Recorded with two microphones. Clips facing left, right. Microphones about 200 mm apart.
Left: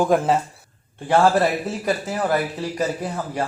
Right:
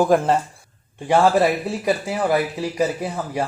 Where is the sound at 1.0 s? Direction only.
10° right (ahead or behind).